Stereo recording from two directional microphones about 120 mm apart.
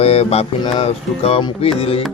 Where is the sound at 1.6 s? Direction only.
55° left (ahead or behind).